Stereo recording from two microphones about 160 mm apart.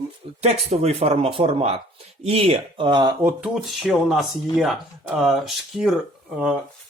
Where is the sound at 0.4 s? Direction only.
40° right (ahead or behind).